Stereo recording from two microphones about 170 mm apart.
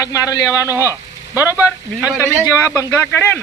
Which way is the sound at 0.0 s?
20° left (ahead or behind).